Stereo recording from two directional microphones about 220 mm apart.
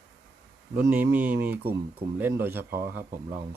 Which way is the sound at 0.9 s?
10° right (ahead or behind).